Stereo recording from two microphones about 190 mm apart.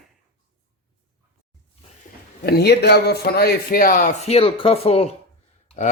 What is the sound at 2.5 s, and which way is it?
Speech, 60° left (ahead or behind).